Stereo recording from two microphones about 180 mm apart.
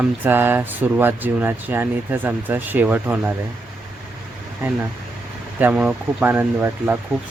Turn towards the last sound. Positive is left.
turn(degrees=-10)  # may be behind; listen again after turning